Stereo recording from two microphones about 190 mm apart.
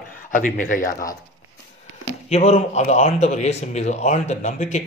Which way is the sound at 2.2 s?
35° left (ahead or behind).